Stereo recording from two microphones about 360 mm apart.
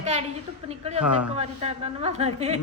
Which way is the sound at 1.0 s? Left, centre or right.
Left.